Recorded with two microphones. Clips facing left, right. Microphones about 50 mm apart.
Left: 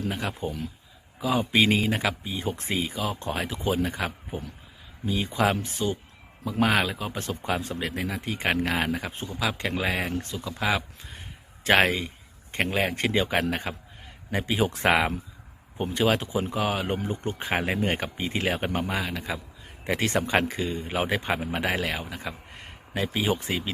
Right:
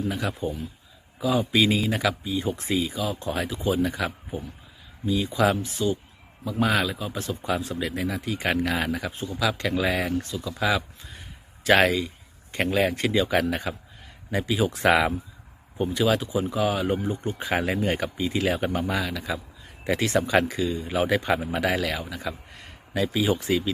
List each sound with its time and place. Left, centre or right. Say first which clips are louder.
0.1 s a man's voice: right 2 dB; left
6.6 s a man's voice: even; left
15.8 s a man's voice: right 1 dB; left
21.1 s a man's voice: right 3 dB; left